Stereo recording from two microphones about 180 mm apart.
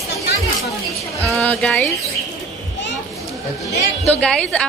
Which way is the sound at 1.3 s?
5° left (ahead or behind).